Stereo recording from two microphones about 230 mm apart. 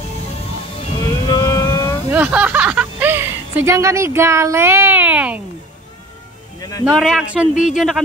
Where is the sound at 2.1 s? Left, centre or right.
Centre.